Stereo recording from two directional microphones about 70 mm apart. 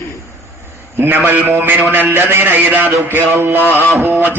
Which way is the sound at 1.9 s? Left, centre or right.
Right.